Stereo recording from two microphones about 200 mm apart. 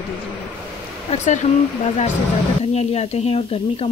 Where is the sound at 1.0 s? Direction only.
40° left (ahead or behind).